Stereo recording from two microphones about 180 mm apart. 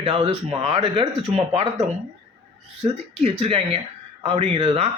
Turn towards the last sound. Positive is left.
turn(degrees=-35)  # may be behind; listen again after turning